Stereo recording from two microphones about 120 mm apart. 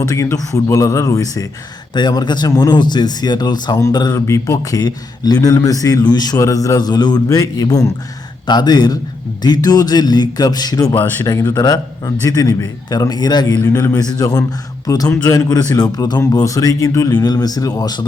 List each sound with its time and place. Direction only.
0.1 s speech: 25° left (ahead or behind)
10.9 s speech: 15° left (ahead or behind)
11.5 s speech: 30° left (ahead or behind)